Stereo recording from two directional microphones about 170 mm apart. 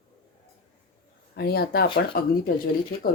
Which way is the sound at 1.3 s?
65° left (ahead or behind).